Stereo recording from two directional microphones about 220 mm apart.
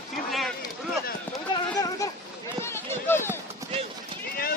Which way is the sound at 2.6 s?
10° left (ahead or behind).